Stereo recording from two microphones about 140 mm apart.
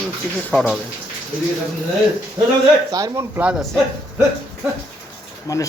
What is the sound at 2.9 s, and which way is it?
Speech, 25° right (ahead or behind).